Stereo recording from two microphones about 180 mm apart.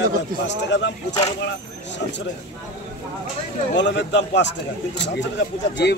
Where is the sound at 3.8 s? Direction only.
80° left.